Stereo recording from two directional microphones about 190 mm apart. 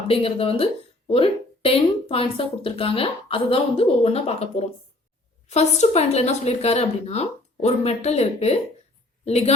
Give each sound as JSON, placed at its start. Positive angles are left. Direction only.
{"t": 0.1, "sound": "speech", "side_deg": 30}